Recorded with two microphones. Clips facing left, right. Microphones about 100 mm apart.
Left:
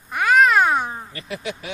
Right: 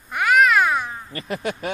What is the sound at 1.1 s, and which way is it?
Speech, 45° right (ahead or behind).